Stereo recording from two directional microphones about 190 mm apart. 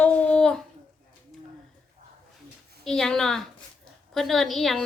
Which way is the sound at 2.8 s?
5° left (ahead or behind).